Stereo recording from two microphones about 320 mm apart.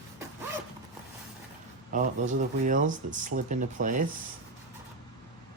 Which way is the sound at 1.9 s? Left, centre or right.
Right.